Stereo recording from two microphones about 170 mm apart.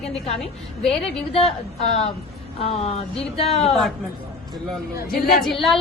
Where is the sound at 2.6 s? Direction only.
35° left (ahead or behind).